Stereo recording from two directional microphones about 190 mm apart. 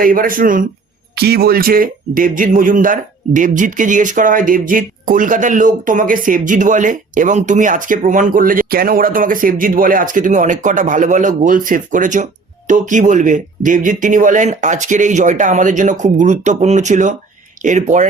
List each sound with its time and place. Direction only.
0.0 s speech: 45° right (ahead or behind)